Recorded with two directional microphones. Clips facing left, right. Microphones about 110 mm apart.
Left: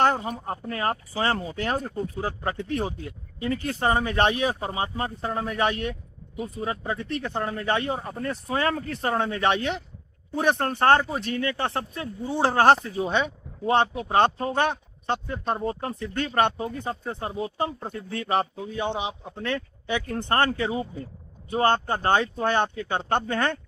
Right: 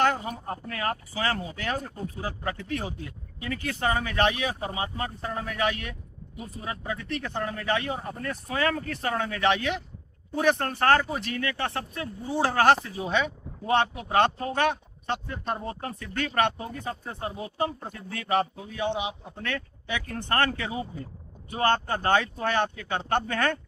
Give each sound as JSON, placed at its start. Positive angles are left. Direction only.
{"t": 0.0, "sound": "speech", "side_deg": 35}